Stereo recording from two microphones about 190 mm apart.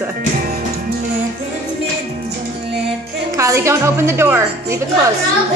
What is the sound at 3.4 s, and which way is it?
A woman's voice, 15° right (ahead or behind).